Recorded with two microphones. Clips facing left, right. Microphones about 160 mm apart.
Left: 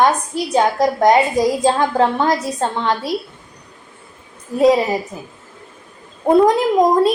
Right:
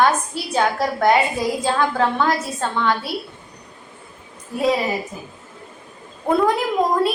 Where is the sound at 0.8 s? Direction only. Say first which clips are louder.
Left 4 dB; 40° left (ahead or behind).